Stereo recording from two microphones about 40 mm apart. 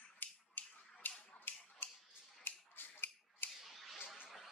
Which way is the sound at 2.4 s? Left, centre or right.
Left.